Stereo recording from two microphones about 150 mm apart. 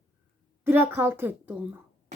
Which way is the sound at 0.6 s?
15° right (ahead or behind).